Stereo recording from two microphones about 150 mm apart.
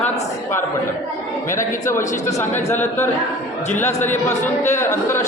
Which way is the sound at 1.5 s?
15° left (ahead or behind).